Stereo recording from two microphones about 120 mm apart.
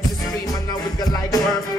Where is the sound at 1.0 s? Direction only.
30° left (ahead or behind).